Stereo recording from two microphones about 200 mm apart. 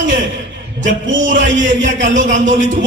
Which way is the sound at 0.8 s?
70° right (ahead or behind).